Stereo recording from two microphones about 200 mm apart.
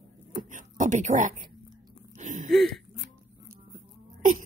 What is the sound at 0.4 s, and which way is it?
Speech, 40° right (ahead or behind).